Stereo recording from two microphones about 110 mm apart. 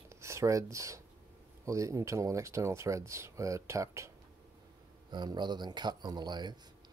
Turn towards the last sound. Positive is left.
turn(degrees=-40)  # may be behind; listen again after turning